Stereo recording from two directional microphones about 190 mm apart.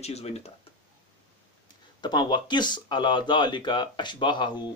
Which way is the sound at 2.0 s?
25° left (ahead or behind).